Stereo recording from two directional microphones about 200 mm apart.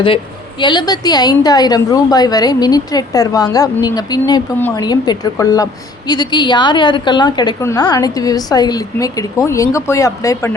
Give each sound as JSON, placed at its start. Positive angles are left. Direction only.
{"t": 0.6, "sound": "a woman's voice", "side_deg": 20}
{"t": 4.5, "sound": "speech", "side_deg": 10}
{"t": 4.8, "sound": "a woman's voice", "side_deg": 20}